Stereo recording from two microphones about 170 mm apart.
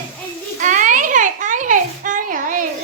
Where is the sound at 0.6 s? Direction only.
50° right (ahead or behind).